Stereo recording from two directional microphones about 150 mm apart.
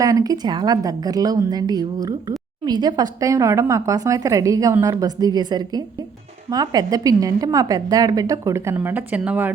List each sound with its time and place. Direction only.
0.0 s a woman's voice: 20° right (ahead or behind)